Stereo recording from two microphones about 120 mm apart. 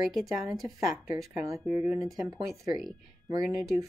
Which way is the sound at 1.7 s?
30° right (ahead or behind).